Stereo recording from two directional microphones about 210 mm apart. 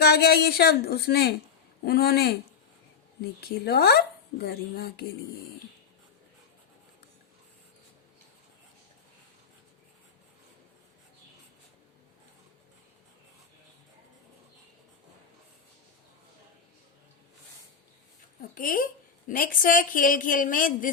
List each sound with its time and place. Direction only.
0.0 s a woman's voice: 50° left (ahead or behind)
3.4 s a woman's voice: 50° left (ahead or behind)
18.5 s a woman's voice: 40° left (ahead or behind)